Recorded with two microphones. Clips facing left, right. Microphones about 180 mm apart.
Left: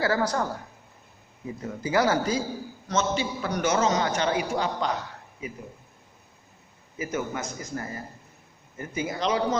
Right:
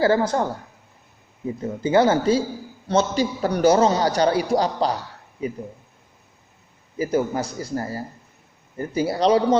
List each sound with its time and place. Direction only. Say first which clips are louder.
0.0 s a man's voice: right 6 dB; 30° right (ahead or behind)
7.0 s a man's voice: right 8 dB; 35° right (ahead or behind)